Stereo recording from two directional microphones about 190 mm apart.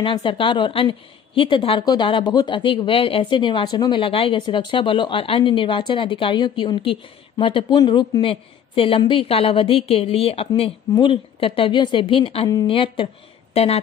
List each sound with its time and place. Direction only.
0.0 s a woman's voice: 25° left (ahead or behind)